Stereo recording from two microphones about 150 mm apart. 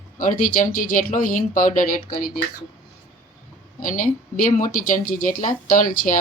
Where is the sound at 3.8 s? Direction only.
65° left (ahead or behind).